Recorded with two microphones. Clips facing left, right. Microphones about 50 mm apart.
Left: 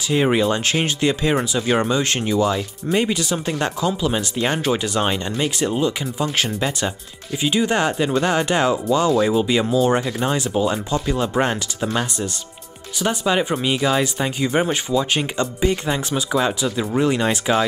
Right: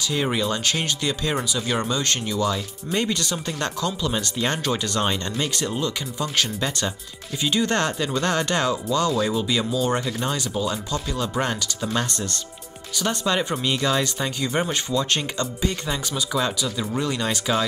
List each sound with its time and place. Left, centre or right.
0.1 s speech: left
10.3 s speech: left
11.9 s speech: centre